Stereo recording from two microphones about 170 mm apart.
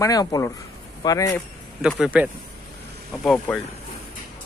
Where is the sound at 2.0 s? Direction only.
10° right (ahead or behind).